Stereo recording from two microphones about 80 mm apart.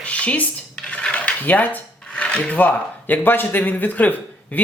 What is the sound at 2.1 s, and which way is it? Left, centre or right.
Speech, centre.